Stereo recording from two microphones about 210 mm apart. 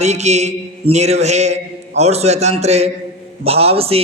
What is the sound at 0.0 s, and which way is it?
Mantra, 30° right (ahead or behind).